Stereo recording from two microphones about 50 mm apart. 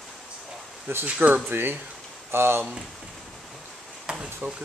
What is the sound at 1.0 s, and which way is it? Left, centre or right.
Speech, right.